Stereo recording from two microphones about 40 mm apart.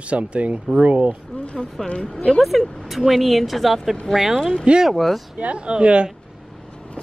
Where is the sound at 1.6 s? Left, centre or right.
Left.